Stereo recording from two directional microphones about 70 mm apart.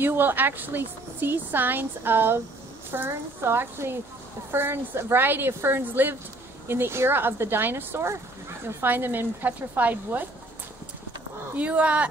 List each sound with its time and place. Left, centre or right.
0.0 s a woman's voice: right
11.5 s a woman's voice: centre